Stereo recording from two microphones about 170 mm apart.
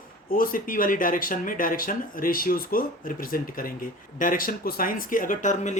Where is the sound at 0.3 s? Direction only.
55° left (ahead or behind).